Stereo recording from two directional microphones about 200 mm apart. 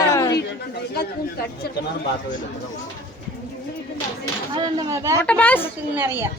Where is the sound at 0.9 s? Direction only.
50° left (ahead or behind).